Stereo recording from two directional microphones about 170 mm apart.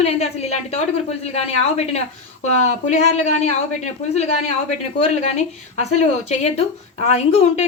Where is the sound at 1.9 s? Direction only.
40° left (ahead or behind).